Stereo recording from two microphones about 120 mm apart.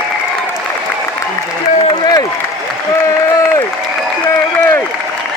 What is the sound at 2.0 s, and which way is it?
Applause, 35° left (ahead or behind).